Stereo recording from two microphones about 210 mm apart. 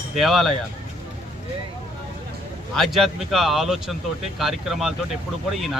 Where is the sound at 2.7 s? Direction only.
Centre (ahead or behind).